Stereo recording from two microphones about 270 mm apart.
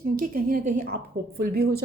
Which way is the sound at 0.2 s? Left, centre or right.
Right.